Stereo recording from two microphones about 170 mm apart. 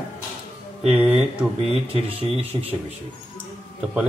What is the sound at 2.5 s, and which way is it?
Speech, 25° right (ahead or behind).